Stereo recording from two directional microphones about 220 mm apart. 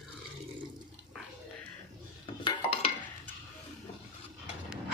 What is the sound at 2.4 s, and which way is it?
Stir, 25° left (ahead or behind).